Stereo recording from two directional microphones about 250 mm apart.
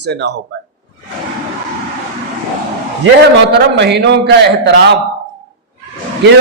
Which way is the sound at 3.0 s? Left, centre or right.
Right.